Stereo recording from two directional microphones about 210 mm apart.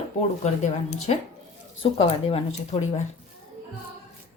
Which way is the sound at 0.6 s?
35° left (ahead or behind).